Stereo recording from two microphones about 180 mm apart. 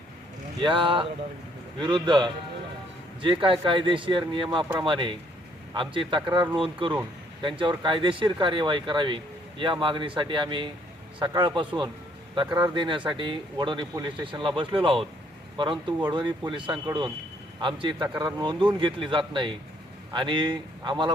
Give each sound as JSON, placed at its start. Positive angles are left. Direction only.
{"t": 0.6, "sound": "a man's voice", "side_deg": -25}